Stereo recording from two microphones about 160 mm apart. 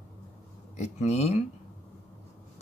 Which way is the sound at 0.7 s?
45° left (ahead or behind).